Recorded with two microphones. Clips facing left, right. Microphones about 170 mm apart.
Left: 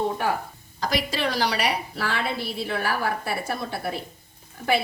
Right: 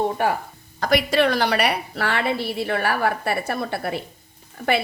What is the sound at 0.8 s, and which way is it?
A woman's voice, 60° right (ahead or behind).